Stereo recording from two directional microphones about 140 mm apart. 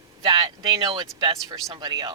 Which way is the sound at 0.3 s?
25° right (ahead or behind).